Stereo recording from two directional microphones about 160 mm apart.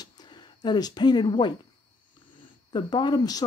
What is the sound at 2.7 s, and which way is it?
Speech, 25° left (ahead or behind).